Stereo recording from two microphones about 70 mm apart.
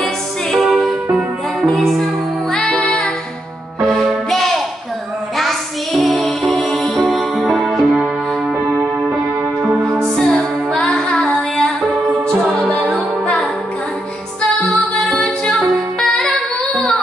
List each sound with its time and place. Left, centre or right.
0.0 s music: centre
5.4 s a sound: centre
6.4 s music: centre
8.6 s music: right
10.1 s music: centre
12.8 s music: centre
14.5 s music: centre
16.0 s music: centre